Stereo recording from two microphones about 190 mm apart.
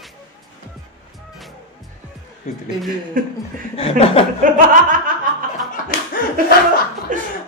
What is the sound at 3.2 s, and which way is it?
Speech, 45° right (ahead or behind).